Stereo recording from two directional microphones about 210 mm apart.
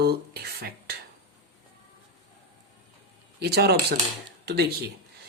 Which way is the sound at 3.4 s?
50° right (ahead or behind).